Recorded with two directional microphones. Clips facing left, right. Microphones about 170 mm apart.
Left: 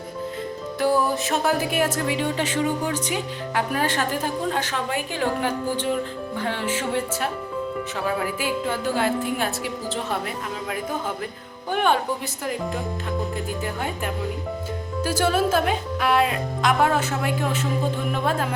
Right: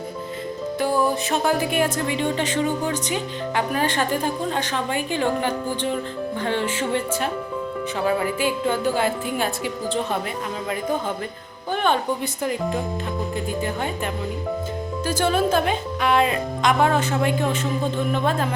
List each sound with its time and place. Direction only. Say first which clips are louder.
0.8 s music: even; centre (ahead or behind)
11.7 s speech: even; 10° left (ahead or behind)
15.0 s music: even; 5° left (ahead or behind)
18.1 s speech: right 2 dB; 5° left (ahead or behind)